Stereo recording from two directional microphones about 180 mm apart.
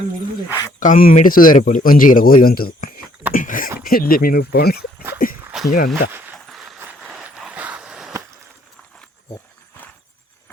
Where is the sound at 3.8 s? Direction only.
55° left (ahead or behind).